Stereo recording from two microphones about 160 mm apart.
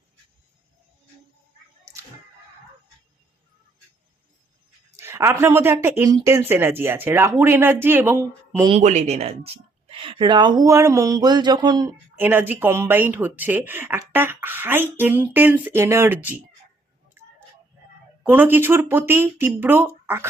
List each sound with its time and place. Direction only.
1.8 s a sound: 20° right (ahead or behind)
4.9 s speech: 15° right (ahead or behind)
8.8 s a woman's voice: 45° right (ahead or behind); by 12.2 s 25° right (ahead or behind)
12.2 s speech: 10° right (ahead or behind)
18.2 s speech: 10° right (ahead or behind)